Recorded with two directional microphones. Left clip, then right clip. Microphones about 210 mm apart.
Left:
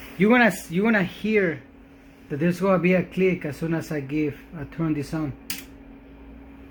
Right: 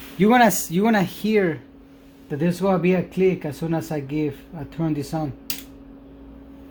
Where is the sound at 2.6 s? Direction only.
30° right (ahead or behind).